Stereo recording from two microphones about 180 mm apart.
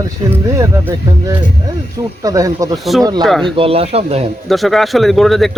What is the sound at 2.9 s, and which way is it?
Speech, centre (ahead or behind).